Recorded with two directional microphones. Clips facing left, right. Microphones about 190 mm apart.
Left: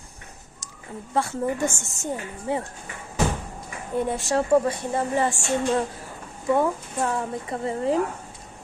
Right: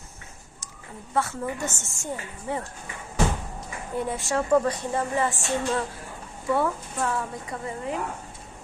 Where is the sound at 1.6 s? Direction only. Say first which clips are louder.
Left 5 dB; 15° left (ahead or behind).